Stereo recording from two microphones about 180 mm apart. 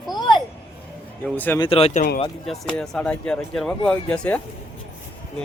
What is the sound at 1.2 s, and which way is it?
Speech, 10° left (ahead or behind).